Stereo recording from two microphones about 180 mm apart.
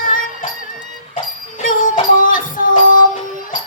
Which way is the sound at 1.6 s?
50° left (ahead or behind).